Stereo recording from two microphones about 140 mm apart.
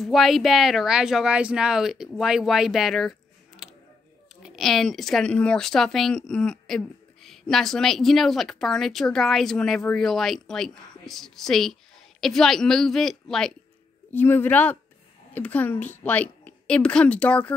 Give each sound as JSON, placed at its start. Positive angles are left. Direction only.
{"t": 0.0, "sound": "speech", "side_deg": 0}
{"t": 14.1, "sound": "a woman's voice", "side_deg": 15}